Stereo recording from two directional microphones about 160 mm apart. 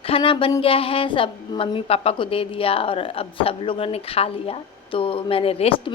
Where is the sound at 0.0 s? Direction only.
35° left (ahead or behind).